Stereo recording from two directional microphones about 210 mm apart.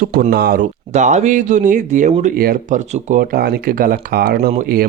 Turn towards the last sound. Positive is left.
turn(degrees=-40)  # may be behind; listen again after turning